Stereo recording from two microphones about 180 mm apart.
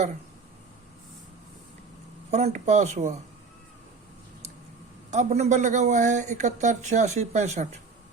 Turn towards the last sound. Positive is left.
turn(degrees=-40)  # may be behind; listen again after turning